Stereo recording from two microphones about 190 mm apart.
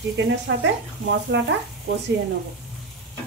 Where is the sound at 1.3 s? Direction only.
65° right (ahead or behind).